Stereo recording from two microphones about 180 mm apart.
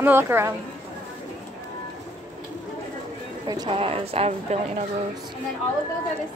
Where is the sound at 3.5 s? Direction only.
25° right (ahead or behind).